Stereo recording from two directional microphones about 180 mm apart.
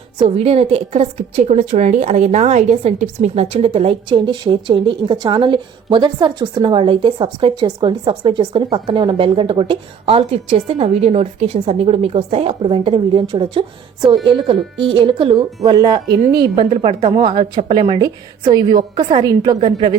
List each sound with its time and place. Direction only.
0.2 s a woman's voice: 35° right (ahead or behind)